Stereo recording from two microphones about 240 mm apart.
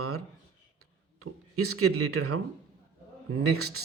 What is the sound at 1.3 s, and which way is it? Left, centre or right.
Speech, right.